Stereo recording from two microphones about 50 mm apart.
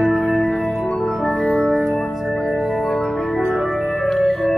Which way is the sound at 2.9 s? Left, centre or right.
Centre.